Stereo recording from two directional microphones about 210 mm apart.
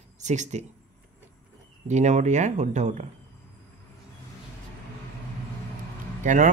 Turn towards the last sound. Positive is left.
turn(degrees=-35)  # may be behind; listen again after turning